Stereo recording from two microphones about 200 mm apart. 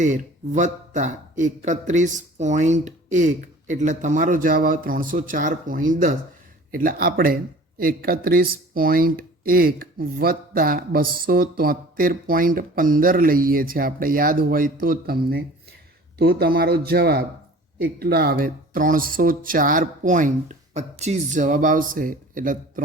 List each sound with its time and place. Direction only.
0.0 s speech: 40° right (ahead or behind)